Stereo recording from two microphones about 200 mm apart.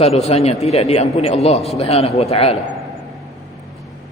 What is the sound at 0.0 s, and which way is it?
A man's voice, 30° left (ahead or behind).